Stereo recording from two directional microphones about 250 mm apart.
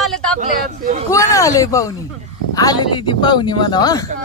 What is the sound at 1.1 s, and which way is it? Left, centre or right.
Speech, centre.